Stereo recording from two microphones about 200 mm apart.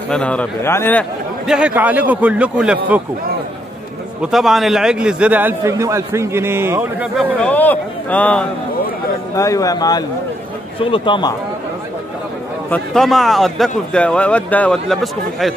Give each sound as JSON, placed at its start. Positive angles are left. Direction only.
{"t": 0.1, "sound": "a man's voice", "side_deg": 5}
{"t": 1.5, "sound": "a man's voice", "side_deg": -5}
{"t": 4.2, "sound": "a man's voice", "side_deg": 0}
{"t": 7.2, "sound": "a man's voice", "side_deg": 5}
{"t": 9.3, "sound": "a man's voice", "side_deg": 15}
{"t": 12.6, "sound": "a man's voice", "side_deg": 5}